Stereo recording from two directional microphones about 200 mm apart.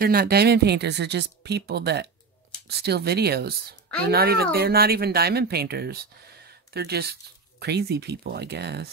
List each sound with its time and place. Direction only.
0.0 s speech: 50° right (ahead or behind)